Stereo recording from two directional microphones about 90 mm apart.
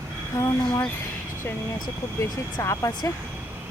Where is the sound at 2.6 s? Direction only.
35° left (ahead or behind).